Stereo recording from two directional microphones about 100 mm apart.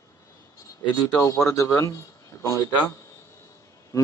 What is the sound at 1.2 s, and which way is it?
Speech, 30° left (ahead or behind).